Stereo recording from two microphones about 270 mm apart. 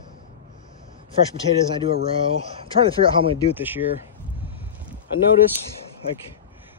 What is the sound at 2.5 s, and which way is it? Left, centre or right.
Speech, centre.